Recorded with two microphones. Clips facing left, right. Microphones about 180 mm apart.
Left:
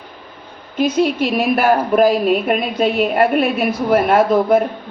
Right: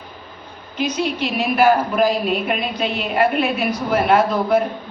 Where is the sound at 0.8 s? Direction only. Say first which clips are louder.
Left 6 dB; 50° left (ahead or behind).